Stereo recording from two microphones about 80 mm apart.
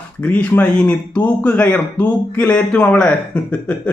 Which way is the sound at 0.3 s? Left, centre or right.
Centre.